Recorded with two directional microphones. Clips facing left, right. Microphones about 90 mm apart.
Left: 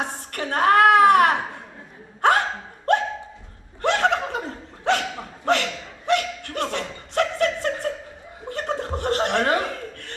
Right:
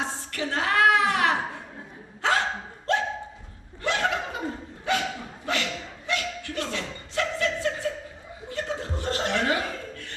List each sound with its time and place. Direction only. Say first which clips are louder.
0.0 s a sound: left 2 dB; 55° left (ahead or behind)
2.2 s hiccup: left 6 dB; 55° left (ahead or behind)
2.9 s dog: left 5 dB; 55° left (ahead or behind)
3.8 s chuckle: left 6 dB; 60° left (ahead or behind)
4.9 s dog: left 5 dB; 65° left (ahead or behind)
5.5 s a sound: left 8 dB; 65° left (ahead or behind)
6.1 s chuckle: left 8 dB; 60° left (ahead or behind)